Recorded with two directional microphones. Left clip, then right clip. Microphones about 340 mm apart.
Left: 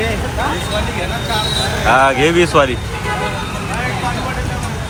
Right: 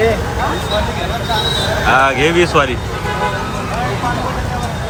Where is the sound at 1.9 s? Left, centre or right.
Centre.